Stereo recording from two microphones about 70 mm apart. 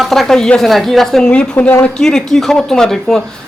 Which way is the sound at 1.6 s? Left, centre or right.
Left.